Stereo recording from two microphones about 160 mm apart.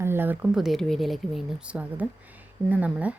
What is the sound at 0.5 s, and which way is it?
Speech, centre (ahead or behind).